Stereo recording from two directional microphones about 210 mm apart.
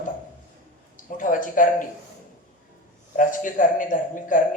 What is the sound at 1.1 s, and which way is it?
Speech, 40° left (ahead or behind).